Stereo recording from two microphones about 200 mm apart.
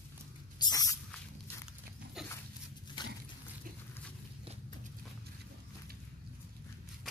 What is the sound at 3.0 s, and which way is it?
Dog, 20° left (ahead or behind).